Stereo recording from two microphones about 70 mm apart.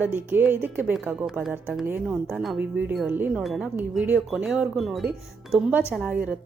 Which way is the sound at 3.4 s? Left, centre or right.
Centre.